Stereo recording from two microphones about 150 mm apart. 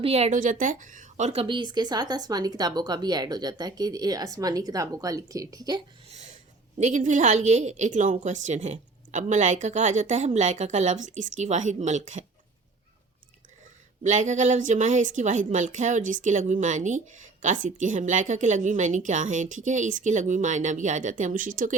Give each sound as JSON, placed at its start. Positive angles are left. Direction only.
{"t": 0.0, "sound": "a woman's voice", "side_deg": -45}
{"t": 0.6, "sound": "speech", "side_deg": -60}
{"t": 6.7, "sound": "a woman's voice", "side_deg": -55}
{"t": 14.0, "sound": "a woman's voice", "side_deg": -55}